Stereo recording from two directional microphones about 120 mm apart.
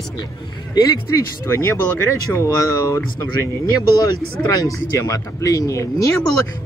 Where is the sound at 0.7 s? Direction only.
30° left (ahead or behind).